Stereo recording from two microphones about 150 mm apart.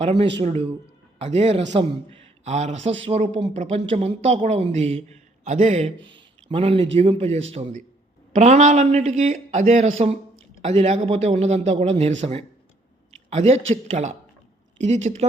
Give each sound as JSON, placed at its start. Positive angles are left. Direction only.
{"t": 0.0, "sound": "a man's voice", "side_deg": -40}
{"t": 6.1, "sound": "a man's voice", "side_deg": -35}